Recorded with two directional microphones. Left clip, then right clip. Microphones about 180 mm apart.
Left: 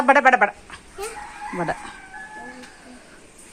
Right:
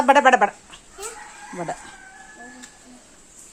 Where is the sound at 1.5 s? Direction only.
10° right (ahead or behind).